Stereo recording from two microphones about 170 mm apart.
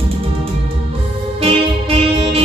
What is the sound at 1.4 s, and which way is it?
Music, 35° right (ahead or behind).